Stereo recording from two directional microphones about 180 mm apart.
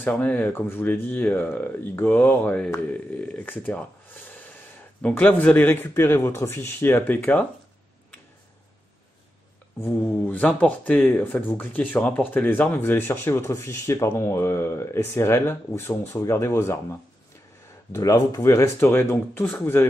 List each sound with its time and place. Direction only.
0.0 s speech: 10° left (ahead or behind)
5.0 s speech: 10° left (ahead or behind)
9.8 s speech: 10° left (ahead or behind)
17.9 s speech: 20° left (ahead or behind)